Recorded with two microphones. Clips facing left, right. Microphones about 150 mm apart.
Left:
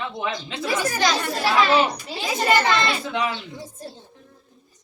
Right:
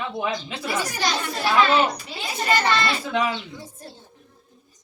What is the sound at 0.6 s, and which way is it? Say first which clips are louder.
Speech: left 5 dB; 90° left.